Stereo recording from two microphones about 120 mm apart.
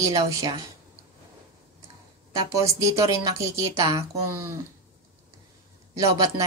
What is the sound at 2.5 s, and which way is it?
Speech, 25° right (ahead or behind).